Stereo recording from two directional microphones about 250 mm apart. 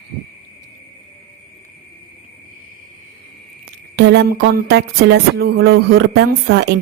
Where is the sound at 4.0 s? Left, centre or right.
Right.